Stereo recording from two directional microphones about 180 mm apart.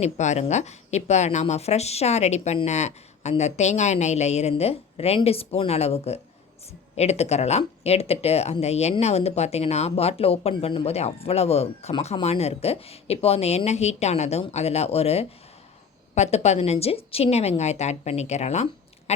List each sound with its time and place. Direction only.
0.0 s speech: 40° left (ahead or behind)